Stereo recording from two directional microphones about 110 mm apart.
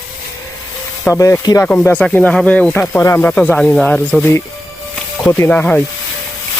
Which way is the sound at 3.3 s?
10° left (ahead or behind).